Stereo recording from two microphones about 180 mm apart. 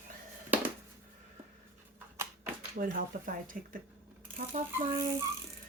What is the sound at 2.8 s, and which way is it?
Speech, 50° right (ahead or behind).